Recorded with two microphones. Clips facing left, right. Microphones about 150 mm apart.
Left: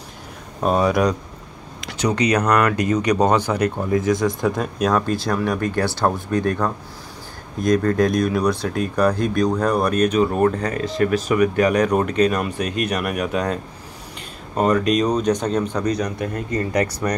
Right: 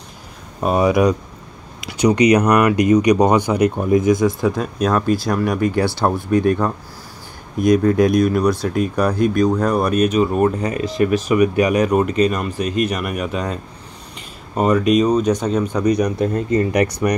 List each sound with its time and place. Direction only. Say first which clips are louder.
0.6 s speech: right 2 dB; 10° right (ahead or behind)
16.2 s speech: right 6 dB; 25° right (ahead or behind)